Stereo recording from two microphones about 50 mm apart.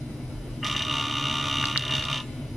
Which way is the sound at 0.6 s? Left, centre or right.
Centre.